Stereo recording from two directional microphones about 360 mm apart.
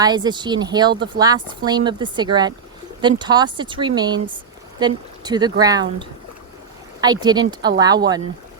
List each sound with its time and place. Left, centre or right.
0.0 s a woman's voice: centre